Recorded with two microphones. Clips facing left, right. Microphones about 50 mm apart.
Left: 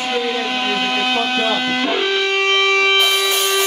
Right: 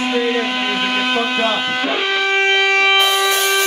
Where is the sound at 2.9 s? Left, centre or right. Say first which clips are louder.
Right 1 dB; centre.